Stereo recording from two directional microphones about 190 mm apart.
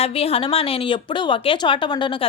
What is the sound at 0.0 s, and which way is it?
A woman's voice, 30° left (ahead or behind).